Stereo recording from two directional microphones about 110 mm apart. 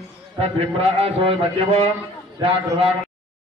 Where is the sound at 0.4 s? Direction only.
65° right (ahead or behind).